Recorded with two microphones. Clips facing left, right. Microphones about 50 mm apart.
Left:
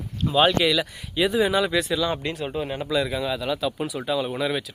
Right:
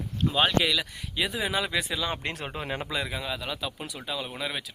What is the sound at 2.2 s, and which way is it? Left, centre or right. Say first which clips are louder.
Speech: left 5 dB; right.